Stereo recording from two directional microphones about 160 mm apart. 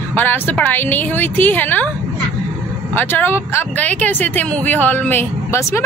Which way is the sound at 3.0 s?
10° left (ahead or behind).